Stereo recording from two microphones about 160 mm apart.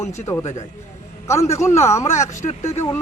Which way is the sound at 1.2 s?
20° left (ahead or behind).